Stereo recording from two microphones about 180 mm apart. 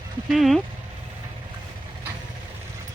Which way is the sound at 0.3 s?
Centre (ahead or behind).